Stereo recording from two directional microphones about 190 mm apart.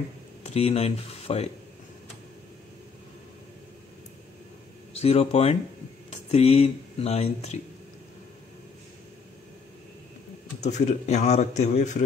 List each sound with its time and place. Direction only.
0.4 s speech: 35° left (ahead or behind)
4.9 s speech: 30° left (ahead or behind)
10.6 s speech: 40° left (ahead or behind)